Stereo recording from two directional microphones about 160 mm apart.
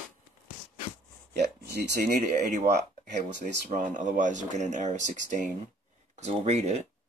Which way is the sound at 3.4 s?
50° right (ahead or behind).